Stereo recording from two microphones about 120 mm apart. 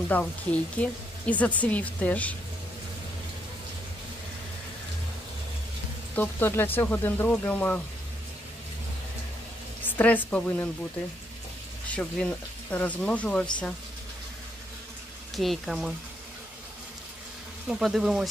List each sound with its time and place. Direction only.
0.1 s speech: 10° left (ahead or behind)
6.1 s speech: 15° left (ahead or behind)
9.8 s speech: 15° left (ahead or behind)
11.9 s speech: 10° left (ahead or behind)
15.3 s speech: centre (ahead or behind)
17.6 s speech: 5° right (ahead or behind)